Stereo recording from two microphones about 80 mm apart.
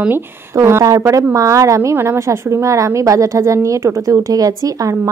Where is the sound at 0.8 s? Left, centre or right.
Right.